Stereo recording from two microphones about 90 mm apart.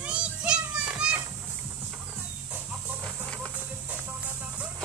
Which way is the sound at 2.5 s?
15° right (ahead or behind).